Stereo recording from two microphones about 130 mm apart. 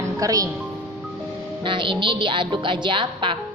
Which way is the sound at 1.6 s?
40° right (ahead or behind).